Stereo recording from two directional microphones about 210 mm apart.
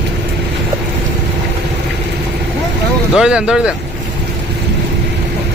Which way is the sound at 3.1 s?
5° right (ahead or behind).